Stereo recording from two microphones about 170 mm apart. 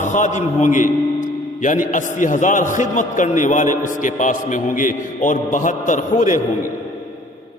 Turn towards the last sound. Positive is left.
turn(degrees=45)  # may be behind; listen again after turning